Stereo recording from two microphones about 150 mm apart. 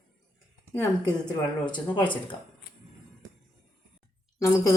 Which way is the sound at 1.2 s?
30° left (ahead or behind).